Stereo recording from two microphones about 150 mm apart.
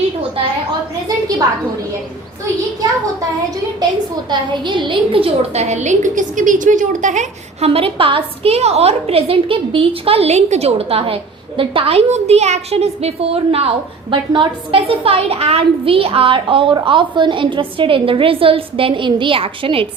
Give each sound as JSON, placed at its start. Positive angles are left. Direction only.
{"t": 4.3, "sound": "a woman's voice", "side_deg": -30}